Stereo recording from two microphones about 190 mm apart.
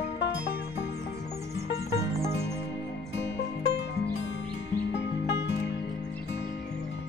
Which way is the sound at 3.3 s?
65° left (ahead or behind).